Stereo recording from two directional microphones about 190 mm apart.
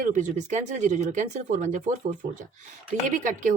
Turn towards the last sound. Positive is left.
turn(degrees=-40)  # may be behind; listen again after turning